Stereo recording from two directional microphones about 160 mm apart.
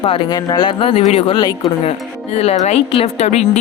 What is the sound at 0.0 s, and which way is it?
Speech, 35° left (ahead or behind).